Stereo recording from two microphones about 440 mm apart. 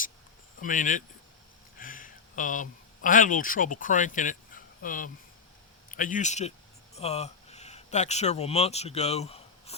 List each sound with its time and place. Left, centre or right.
0.6 s a man's voice: centre